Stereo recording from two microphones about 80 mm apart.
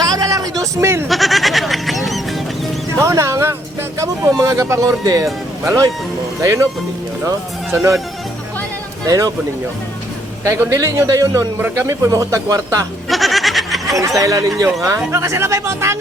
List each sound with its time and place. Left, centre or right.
0.0 s a sound: right
1.0 s goat: centre
3.0 s music: right
3.9 s a man's voice: right
9.0 s a man's voice: right
10.4 s a man's voice: right
13.1 s goat: centre
13.9 s a man's voice: right